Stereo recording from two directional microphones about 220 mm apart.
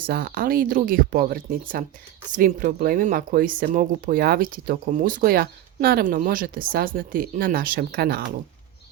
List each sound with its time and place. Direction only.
0.1 s speech: 45° right (ahead or behind)